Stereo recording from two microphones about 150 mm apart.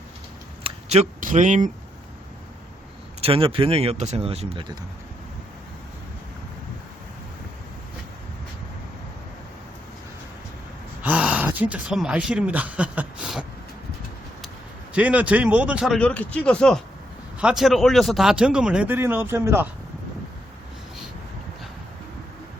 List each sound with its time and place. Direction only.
0.6 s a sound: 45° right (ahead or behind)
1.2 s speech: 55° right (ahead or behind)
3.2 s speech: 40° right (ahead or behind)
11.0 s speech: 10° right (ahead or behind)
14.9 s speech: 10° right (ahead or behind)
16.0 s speech: 10° left (ahead or behind); by 19.6 s 15° right (ahead or behind)